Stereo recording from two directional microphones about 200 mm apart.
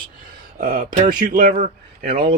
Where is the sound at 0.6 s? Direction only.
40° right (ahead or behind).